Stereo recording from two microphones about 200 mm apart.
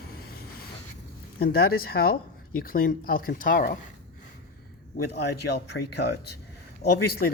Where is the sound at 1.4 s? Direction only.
50° left (ahead or behind).